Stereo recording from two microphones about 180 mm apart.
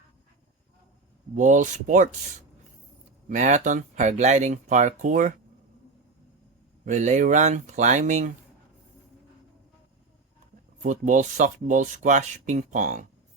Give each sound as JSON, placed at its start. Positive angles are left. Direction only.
{"t": 1.4, "sound": "speech", "side_deg": -45}
{"t": 3.2, "sound": "speech", "side_deg": -40}
{"t": 6.8, "sound": "speech", "side_deg": -40}
{"t": 10.8, "sound": "speech", "side_deg": -45}